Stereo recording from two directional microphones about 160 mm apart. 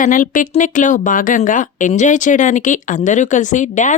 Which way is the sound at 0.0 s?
55° left (ahead or behind).